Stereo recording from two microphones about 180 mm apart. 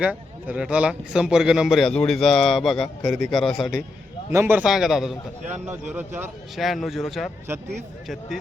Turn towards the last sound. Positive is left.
turn(degrees=0)  # may be behind; listen again after turning